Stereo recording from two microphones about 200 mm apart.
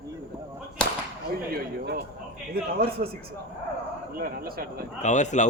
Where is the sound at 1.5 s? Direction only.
50° right (ahead or behind).